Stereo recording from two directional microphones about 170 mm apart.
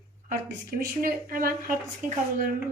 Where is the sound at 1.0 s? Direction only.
55° right (ahead or behind).